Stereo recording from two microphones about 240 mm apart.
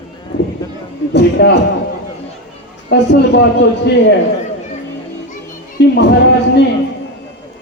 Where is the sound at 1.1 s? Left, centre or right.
Left.